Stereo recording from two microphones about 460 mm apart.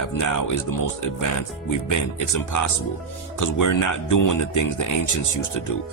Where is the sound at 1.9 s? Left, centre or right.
Left.